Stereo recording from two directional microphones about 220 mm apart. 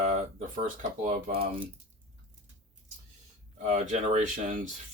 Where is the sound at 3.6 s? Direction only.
30° right (ahead or behind).